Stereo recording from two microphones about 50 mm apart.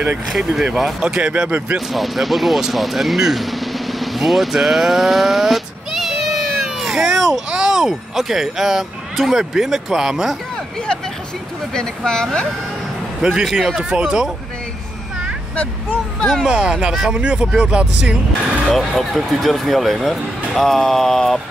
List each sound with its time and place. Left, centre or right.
0.4 s a man's voice: centre
1.3 s speech: right
1.9 s speech: centre
11.7 s speech: centre
13.2 s a man's voice: centre
15.5 s speech: left
16.4 s a man's voice: centre
18.7 s speech: centre